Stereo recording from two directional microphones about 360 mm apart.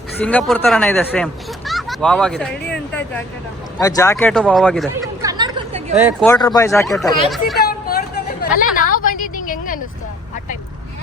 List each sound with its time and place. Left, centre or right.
0.2 s speech: centre
7.6 s vehicle: left
8.4 s a sound: left